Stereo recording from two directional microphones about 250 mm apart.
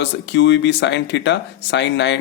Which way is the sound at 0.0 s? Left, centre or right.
Left.